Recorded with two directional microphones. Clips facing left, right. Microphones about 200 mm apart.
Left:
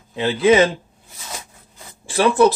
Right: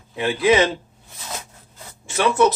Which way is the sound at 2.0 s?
30° left (ahead or behind).